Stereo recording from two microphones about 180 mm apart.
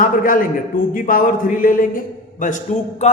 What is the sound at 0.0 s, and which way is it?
A man's voice, 50° left (ahead or behind).